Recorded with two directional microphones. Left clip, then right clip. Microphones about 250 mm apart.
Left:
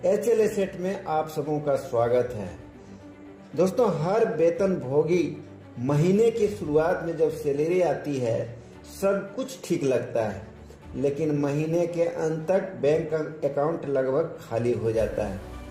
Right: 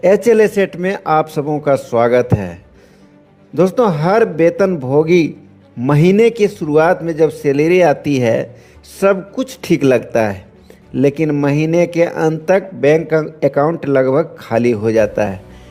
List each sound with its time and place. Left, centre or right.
0.0 s speech: right
3.5 s speech: right